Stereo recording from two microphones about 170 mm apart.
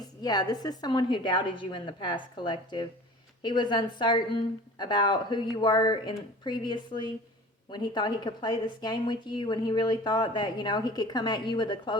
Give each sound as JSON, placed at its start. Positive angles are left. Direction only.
{"t": 0.0, "sound": "a woman's voice", "side_deg": 25}